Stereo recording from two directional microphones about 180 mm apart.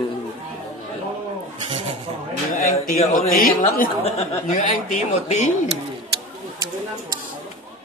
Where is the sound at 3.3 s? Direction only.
50° left (ahead or behind).